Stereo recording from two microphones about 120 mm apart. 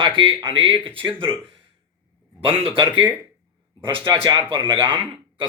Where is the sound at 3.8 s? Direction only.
45° right (ahead or behind).